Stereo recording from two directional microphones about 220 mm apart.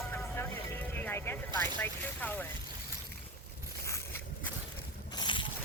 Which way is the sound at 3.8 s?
15° left (ahead or behind).